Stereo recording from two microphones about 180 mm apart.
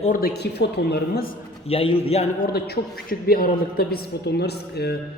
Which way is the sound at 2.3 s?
55° left (ahead or behind).